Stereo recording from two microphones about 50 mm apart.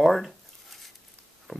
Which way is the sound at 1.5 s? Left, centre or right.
Centre.